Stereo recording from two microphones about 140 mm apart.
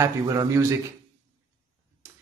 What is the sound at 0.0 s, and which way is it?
Speech, 25° right (ahead or behind).